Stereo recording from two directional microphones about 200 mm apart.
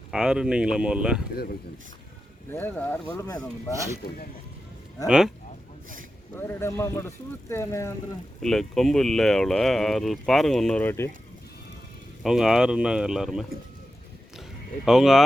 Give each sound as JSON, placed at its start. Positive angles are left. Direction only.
{"t": 0.1, "sound": "speech", "side_deg": -5}
{"t": 2.5, "sound": "speech", "side_deg": 10}
{"t": 4.0, "sound": "speech", "side_deg": 50}
{"t": 5.0, "sound": "speech", "side_deg": -5}
{"t": 6.3, "sound": "speech", "side_deg": 10}
{"t": 8.4, "sound": "speech", "side_deg": 0}
{"t": 12.2, "sound": "speech", "side_deg": 0}
{"t": 14.8, "sound": "speech", "side_deg": 0}